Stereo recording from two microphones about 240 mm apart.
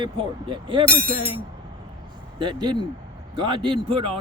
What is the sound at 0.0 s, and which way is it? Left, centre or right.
Speech, centre.